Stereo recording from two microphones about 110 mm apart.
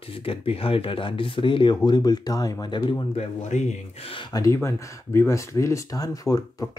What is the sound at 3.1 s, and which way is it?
Speech, 90° left.